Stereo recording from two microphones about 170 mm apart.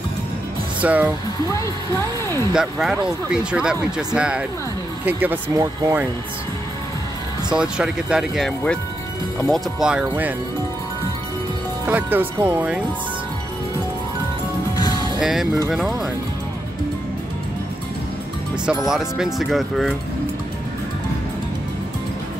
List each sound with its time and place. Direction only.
0.7 s speech: 10° right (ahead or behind)
2.5 s speech: centre (ahead or behind); by 6.0 s 20° right (ahead or behind)
7.5 s speech: 5° right (ahead or behind)
11.8 s speech: 10° right (ahead or behind)
14.8 s music: 25° left (ahead or behind)
15.1 s speech: centre (ahead or behind)
18.9 s speech: 5° right (ahead or behind)